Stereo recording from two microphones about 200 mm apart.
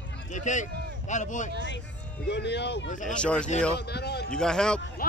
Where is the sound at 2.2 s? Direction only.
60° left (ahead or behind).